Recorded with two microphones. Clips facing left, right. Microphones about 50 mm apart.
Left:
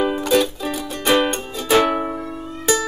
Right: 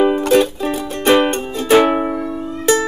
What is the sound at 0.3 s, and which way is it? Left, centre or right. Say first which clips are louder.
Music: right 4 dB; right.